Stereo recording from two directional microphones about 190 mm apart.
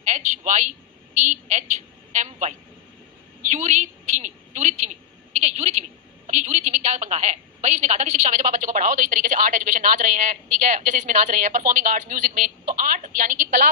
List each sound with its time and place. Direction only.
0.0 s a woman's voice: 40° right (ahead or behind)